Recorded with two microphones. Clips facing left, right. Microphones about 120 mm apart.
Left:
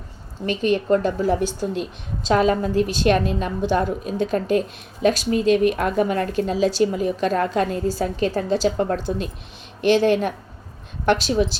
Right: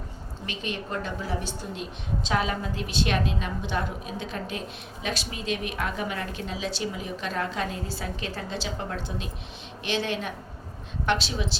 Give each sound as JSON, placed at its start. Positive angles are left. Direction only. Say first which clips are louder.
{"t": 0.4, "sound": "a woman's voice", "louder": "left 14 dB", "side_deg": 45}